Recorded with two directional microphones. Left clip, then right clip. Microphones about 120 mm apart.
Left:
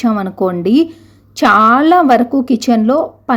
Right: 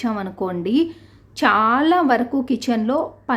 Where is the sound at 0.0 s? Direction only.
40° left (ahead or behind).